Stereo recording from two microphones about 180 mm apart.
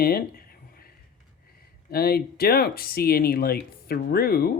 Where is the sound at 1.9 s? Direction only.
60° left (ahead or behind).